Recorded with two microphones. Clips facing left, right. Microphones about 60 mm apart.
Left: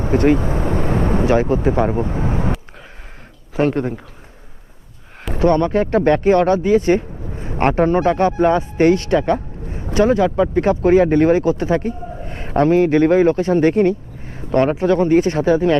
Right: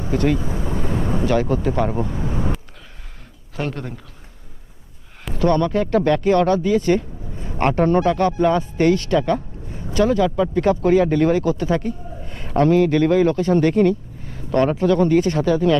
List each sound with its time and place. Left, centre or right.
0.3 s vehicle: left
1.3 s speech: left
3.6 s speech: left
5.4 s a man's voice: left